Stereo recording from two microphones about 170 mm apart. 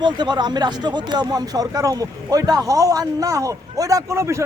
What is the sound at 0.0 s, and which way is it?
Speech, 25° right (ahead or behind).